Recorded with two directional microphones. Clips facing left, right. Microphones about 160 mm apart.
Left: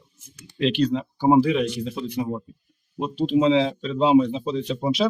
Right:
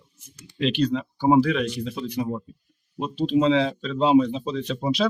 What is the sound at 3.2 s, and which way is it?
Speech, 5° left (ahead or behind).